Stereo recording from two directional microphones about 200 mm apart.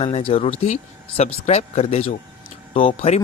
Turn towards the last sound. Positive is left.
turn(degrees=30)  # may be behind; listen again after turning